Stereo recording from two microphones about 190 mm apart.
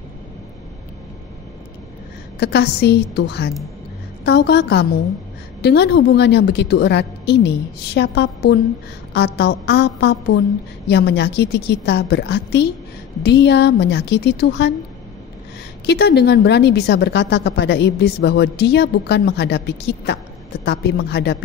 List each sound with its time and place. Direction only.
2.4 s a woman's voice: 60° left (ahead or behind)
15.8 s a woman's voice: 60° left (ahead or behind)